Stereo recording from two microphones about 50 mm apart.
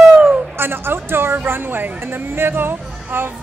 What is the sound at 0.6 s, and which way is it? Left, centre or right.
A woman's voice, right.